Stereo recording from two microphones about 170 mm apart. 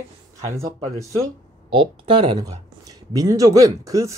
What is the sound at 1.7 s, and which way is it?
Speech, 30° right (ahead or behind).